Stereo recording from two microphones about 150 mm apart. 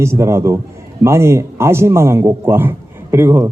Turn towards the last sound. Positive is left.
turn(degrees=-15)  # may be behind; listen again after turning